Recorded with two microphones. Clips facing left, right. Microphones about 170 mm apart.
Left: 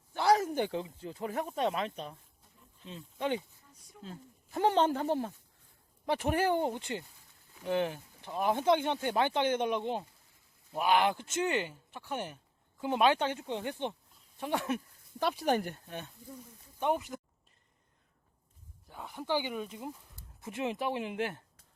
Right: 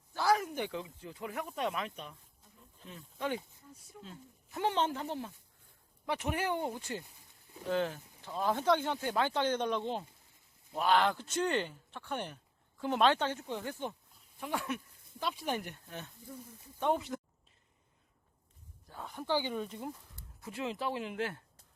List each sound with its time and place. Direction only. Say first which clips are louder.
0.1 s speech: left 3 dB; 25° left (ahead or behind)
2.8 s speech: left 3 dB; 20° left (ahead or behind)
4.0 s speech: left 7 dB; 40° left (ahead or behind)
6.1 s speech: left 5 dB; 35° left (ahead or behind)
15.2 s speech: left 5 dB; 60° left (ahead or behind)
15.4 s speech: left 9 dB; 35° left (ahead or behind)
16.8 s speech: even; 10° left (ahead or behind)
18.9 s speech: left 1 dB; 10° left (ahead or behind)
20.4 s speech: left 3 dB; 20° left (ahead or behind)